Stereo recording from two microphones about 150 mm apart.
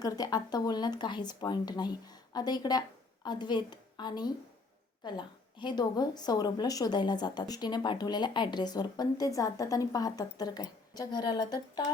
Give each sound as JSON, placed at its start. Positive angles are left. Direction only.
{"t": 0.0, "sound": "a woman's voice", "side_deg": 25}